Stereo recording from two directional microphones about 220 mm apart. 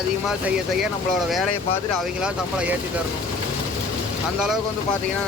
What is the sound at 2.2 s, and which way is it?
Speech, 5° right (ahead or behind).